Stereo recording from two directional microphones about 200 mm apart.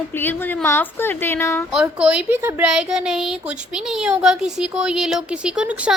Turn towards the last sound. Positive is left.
turn(degrees=-5)  # may be behind; listen again after turning